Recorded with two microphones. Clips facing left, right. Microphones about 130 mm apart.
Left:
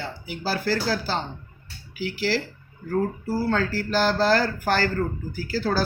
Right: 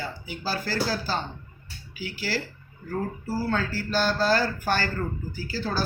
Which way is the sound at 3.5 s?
65° left (ahead or behind).